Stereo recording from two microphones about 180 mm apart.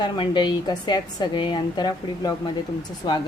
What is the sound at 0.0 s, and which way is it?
A woman's voice, 25° left (ahead or behind).